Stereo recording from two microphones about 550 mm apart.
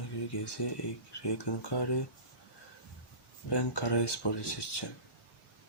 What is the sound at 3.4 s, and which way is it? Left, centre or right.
Speech, left.